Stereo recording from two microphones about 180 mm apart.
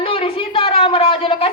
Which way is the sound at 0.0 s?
30° left (ahead or behind).